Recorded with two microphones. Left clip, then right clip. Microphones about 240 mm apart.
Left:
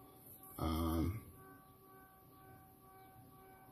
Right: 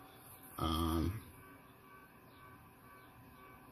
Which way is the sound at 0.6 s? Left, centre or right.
Centre.